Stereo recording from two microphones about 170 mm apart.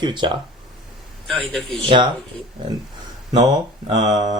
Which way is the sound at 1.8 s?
30° right (ahead or behind).